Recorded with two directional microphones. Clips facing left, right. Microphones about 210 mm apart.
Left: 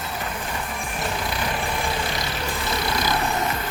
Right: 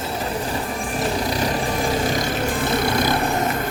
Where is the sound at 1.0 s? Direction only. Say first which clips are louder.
Right 6 dB; 35° right (ahead or behind); by 3.5 s 55° right (ahead or behind).